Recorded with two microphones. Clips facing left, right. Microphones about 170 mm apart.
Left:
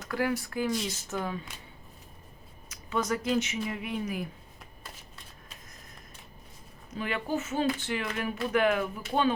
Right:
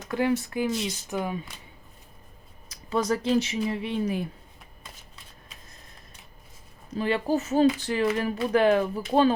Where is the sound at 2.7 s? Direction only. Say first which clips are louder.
Right 4 dB; 35° right (ahead or behind).